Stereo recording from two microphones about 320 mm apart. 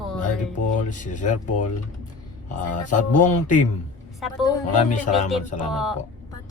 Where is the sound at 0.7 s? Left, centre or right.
Left.